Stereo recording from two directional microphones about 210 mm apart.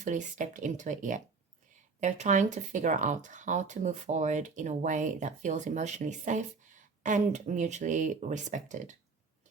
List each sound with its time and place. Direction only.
0.0 s speech: 35° right (ahead or behind)